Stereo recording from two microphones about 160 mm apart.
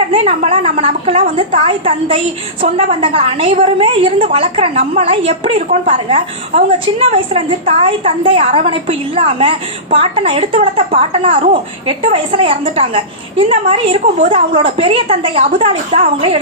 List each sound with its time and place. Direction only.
0.1 s a woman's voice: 40° right (ahead or behind)